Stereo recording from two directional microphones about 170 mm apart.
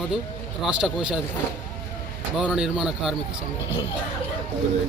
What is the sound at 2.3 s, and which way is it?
Speech, 5° right (ahead or behind).